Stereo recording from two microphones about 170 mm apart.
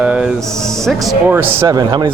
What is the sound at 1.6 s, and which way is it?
Speech, 20° right (ahead or behind).